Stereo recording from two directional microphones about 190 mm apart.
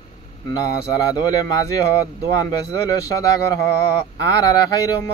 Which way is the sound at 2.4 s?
20° left (ahead or behind).